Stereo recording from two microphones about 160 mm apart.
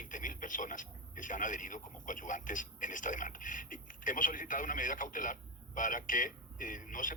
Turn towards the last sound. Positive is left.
turn(degrees=55)  # may be behind; listen again after turning